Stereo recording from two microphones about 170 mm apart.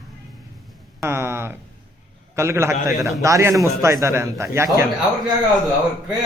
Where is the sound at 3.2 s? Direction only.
20° right (ahead or behind).